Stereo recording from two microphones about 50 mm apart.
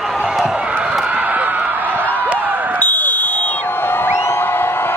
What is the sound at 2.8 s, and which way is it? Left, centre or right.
Music, left.